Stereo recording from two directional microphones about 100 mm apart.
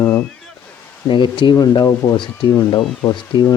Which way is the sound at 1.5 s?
40° left (ahead or behind).